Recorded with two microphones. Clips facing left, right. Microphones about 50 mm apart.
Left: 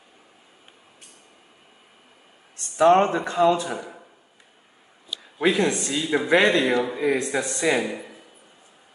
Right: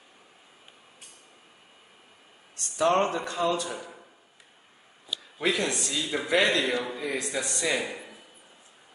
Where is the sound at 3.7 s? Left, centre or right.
Centre.